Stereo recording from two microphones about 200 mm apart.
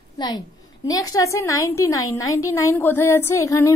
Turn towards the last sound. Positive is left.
turn(degrees=15)  # may be behind; listen again after turning